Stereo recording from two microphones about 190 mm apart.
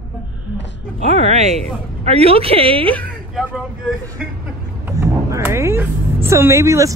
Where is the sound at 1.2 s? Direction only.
35° right (ahead or behind).